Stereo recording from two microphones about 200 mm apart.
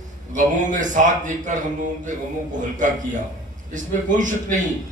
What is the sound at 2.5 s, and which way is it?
A man's voice, 40° right (ahead or behind).